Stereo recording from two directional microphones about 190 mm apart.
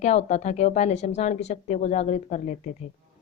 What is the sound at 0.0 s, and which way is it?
Speech, 35° left (ahead or behind).